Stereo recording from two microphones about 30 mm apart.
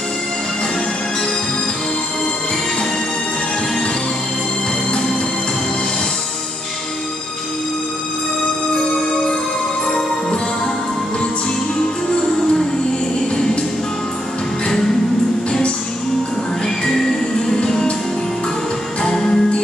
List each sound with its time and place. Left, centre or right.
16.6 s music: centre
19.0 s music: left